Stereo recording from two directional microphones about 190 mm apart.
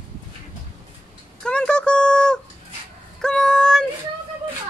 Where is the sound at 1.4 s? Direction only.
5° left (ahead or behind).